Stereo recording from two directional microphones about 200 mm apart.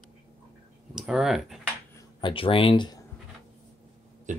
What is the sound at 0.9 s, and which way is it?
Speech, 5° right (ahead or behind).